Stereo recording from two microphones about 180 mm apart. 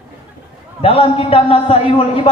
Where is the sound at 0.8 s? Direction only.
30° left (ahead or behind).